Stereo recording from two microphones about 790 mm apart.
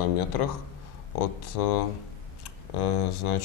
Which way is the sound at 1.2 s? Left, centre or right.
Left.